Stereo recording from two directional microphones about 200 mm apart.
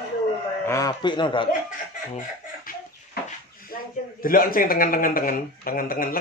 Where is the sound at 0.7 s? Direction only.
15° left (ahead or behind).